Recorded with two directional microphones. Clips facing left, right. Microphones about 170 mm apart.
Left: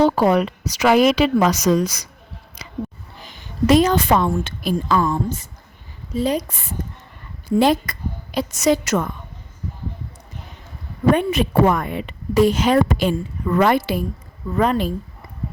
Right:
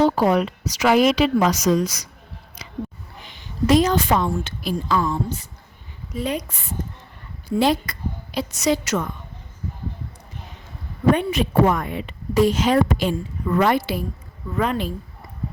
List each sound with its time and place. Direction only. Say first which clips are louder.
0.0 s a woman's voice: left 2 dB; 70° left (ahead or behind)
3.7 s a woman's voice: left 2 dB; 65° left (ahead or behind)
6.1 s a woman's voice: left 5 dB; 30° left (ahead or behind)
7.4 s a woman's voice: left 3 dB; 50° left (ahead or behind)
11.1 s a woman's voice: left 2 dB; 50° left (ahead or behind)
14.5 s a woman's voice: left 4 dB; 40° left (ahead or behind)